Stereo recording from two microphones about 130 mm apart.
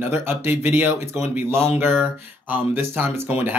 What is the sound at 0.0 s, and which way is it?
Speech, 15° right (ahead or behind).